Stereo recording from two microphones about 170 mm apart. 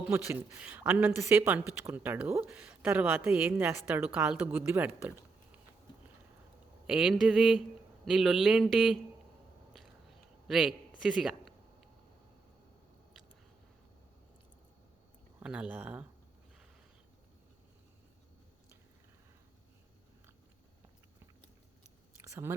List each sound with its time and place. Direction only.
0.1 s speech: 10° right (ahead or behind)
6.8 s speech: 5° right (ahead or behind)
10.5 s a man's voice: centre (ahead or behind)
15.4 s speech: 5° right (ahead or behind)
22.2 s a sound: 15° right (ahead or behind)